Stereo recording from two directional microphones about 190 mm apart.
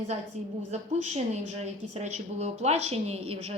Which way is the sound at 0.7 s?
35° right (ahead or behind).